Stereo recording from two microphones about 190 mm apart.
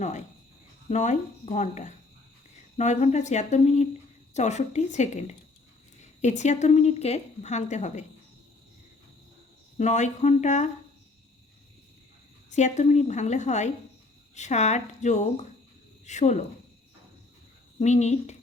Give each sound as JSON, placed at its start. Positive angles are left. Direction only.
{"t": 0.0, "sound": "a woman's voice", "side_deg": 40}
{"t": 9.7, "sound": "a woman's voice", "side_deg": 40}
{"t": 12.5, "sound": "a woman's voice", "side_deg": 40}
{"t": 17.7, "sound": "a woman's voice", "side_deg": 35}